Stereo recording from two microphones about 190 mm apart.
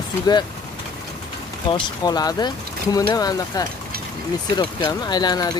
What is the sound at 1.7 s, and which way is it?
Speech, 20° left (ahead or behind).